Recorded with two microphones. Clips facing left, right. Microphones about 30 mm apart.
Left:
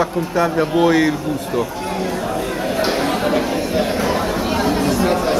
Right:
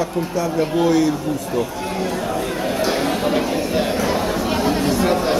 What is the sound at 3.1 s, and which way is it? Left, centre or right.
Chatter, left.